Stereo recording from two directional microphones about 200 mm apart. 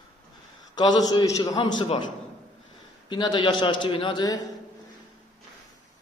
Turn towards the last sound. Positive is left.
turn(degrees=20)  # may be behind; listen again after turning